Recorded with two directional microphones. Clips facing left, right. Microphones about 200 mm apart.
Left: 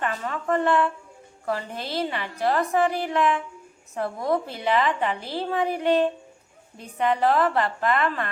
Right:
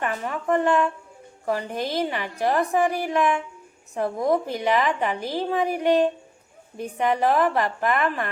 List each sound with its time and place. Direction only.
0.0 s a woman's voice: 15° right (ahead or behind)